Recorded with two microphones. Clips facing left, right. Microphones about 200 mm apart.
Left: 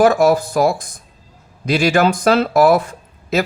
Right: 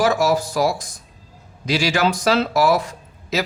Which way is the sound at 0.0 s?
55° left (ahead or behind).